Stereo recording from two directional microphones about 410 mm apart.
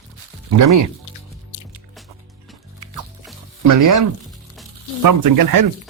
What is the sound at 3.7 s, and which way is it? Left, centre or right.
Speech, right.